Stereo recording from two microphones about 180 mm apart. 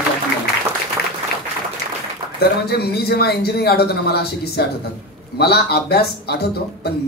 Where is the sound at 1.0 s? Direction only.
65° left (ahead or behind).